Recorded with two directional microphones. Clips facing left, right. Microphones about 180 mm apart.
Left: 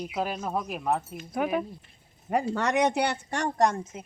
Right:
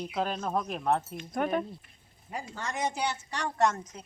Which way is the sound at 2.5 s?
70° left (ahead or behind).